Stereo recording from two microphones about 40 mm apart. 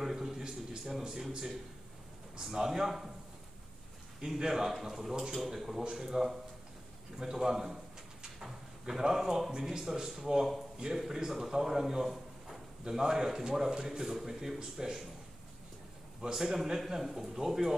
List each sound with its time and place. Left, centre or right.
0.0 s a man's voice: centre
4.4 s a man's voice: centre
7.2 s drawer open or close: centre
9.7 s a man's voice: centre
16.2 s a man's voice: right
16.8 s a man's voice: centre